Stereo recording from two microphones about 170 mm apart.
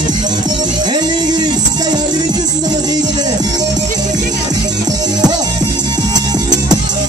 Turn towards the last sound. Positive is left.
turn(degrees=-25)  # may be behind; listen again after turning